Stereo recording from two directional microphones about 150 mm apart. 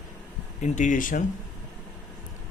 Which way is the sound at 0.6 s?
55° left (ahead or behind).